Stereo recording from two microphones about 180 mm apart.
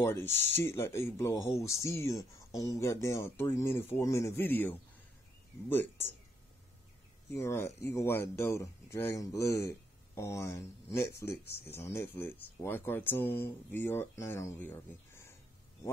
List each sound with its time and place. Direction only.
0.0 s speech: 10° left (ahead or behind)
7.3 s speech: 15° left (ahead or behind)